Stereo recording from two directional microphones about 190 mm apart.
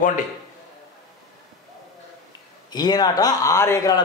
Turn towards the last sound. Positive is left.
turn(degrees=15)  # may be behind; listen again after turning